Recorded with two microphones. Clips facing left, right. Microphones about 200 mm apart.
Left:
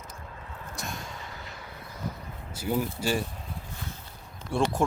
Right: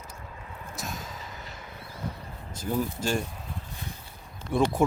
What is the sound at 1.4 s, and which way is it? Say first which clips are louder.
Vehicle: even; 20° right (ahead or behind).